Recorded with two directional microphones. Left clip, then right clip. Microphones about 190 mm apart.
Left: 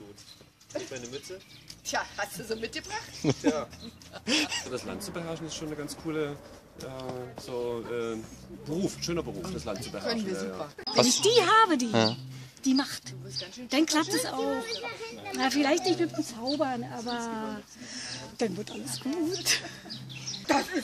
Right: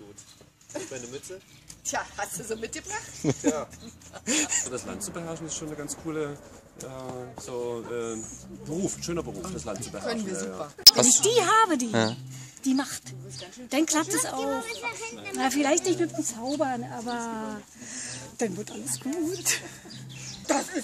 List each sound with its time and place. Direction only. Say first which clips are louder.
1.9 s a woman's voice: right 1 dB; 10° right (ahead or behind)
14.8 s a child's voice: right 3 dB; 60° right (ahead or behind)
15.3 s speech: right 1 dB; 5° right (ahead or behind)
20.2 s a sound: left 1 dB; 5° right (ahead or behind)